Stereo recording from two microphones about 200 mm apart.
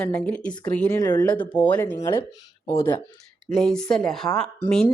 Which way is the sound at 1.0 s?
20° left (ahead or behind).